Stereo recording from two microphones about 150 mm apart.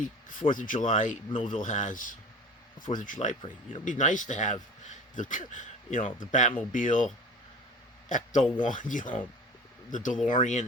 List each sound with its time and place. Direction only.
0.0 s speech: 60° left (ahead or behind)
1.3 s speech: 35° left (ahead or behind)
1.6 s a man's voice: 55° left (ahead or behind)
8.1 s speech: 55° left (ahead or behind)